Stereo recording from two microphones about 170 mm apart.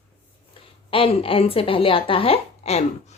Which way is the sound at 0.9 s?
35° left (ahead or behind).